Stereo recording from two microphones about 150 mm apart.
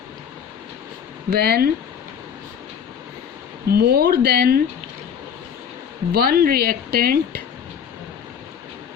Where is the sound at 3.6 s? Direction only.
90° right.